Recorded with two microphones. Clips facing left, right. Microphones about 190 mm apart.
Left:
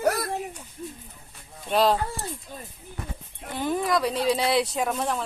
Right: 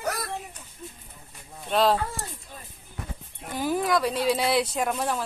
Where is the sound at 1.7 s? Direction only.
Centre (ahead or behind).